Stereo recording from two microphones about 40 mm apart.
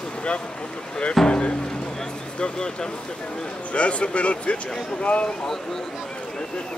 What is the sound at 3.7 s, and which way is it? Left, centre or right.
Speech, left.